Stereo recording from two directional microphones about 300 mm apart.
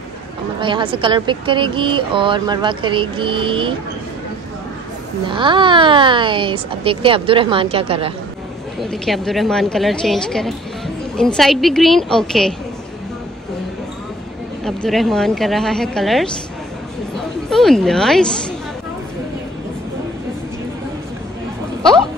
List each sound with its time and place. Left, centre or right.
0.6 s speech: centre
5.3 s speech: centre
8.8 s a woman's voice: centre
14.6 s a woman's voice: centre
17.5 s a woman's voice: centre